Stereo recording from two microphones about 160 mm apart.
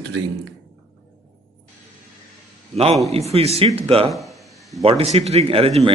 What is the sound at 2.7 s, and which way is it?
A man's voice, 40° right (ahead or behind).